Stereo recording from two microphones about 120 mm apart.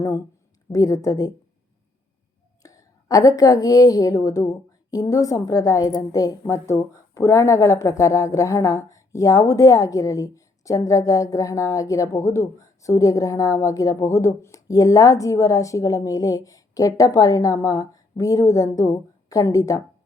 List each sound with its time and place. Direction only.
0.7 s a woman's voice: 30° left (ahead or behind)
2.6 s a woman's voice: 30° left (ahead or behind)